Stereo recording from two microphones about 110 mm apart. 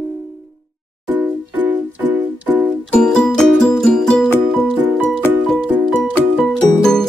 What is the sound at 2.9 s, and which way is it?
Music, 10° left (ahead or behind).